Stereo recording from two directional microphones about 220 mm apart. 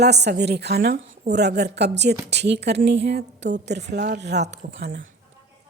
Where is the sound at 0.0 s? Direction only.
50° right (ahead or behind).